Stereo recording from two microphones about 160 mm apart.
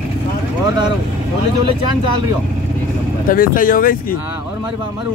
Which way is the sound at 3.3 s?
60° left (ahead or behind).